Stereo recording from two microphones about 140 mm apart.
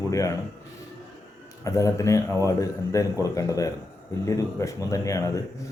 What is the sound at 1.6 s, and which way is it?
A man's voice, 20° left (ahead or behind).